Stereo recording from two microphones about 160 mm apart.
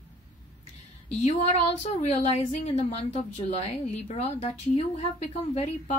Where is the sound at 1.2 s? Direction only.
45° left (ahead or behind).